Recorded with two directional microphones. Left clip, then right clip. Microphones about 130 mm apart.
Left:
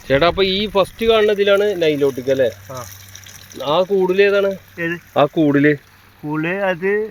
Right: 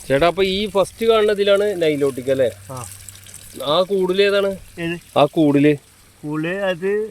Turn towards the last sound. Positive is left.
turn(degrees=-15)  # may be behind; listen again after turning